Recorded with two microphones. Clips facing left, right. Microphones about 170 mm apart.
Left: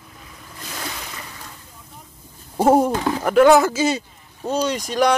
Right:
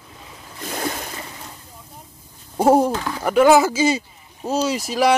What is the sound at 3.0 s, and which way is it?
Speech, 20° left (ahead or behind).